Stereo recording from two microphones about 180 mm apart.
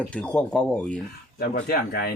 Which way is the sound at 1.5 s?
60° left (ahead or behind).